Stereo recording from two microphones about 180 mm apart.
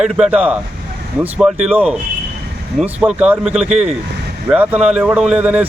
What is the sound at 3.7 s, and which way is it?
Speech, 40° right (ahead or behind).